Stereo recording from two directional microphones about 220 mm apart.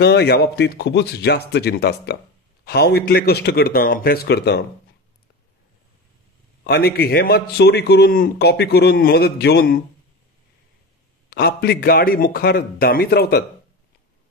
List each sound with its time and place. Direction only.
0.0 s a man's voice: 45° left (ahead or behind)
6.6 s a man's voice: 45° left (ahead or behind)
11.2 s a man's voice: 45° left (ahead or behind)